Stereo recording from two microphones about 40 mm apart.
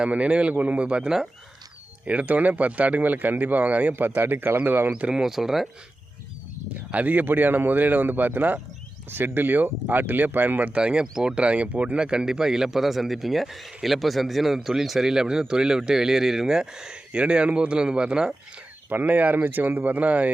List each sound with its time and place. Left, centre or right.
0.1 s speech: right
1.0 s a man's voice: centre
2.0 s speech: right
3.9 s speech: right
4.9 s speech: right
5.1 s a man's voice: centre
6.7 s a man's voice: right
9.0 s a man's voice: right
10.7 s speech: right
11.9 s a man's voice: right
17.1 s speech: right
19.0 s a man's voice: right
20.0 s speech: right